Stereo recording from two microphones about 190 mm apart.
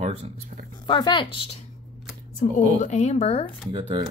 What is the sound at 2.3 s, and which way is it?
A woman's voice, 40° left (ahead or behind).